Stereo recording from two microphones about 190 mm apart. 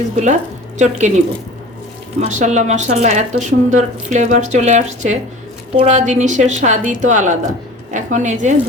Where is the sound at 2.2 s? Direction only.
40° right (ahead or behind).